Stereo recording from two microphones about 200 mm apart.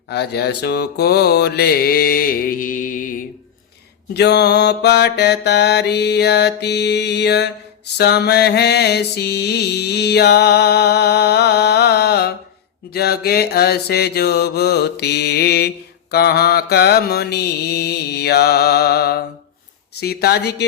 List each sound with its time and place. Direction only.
0.1 s mantra: 55° left (ahead or behind)
4.1 s mantra: 55° left (ahead or behind)